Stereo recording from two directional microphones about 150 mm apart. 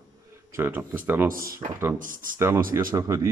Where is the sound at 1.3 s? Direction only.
75° right (ahead or behind).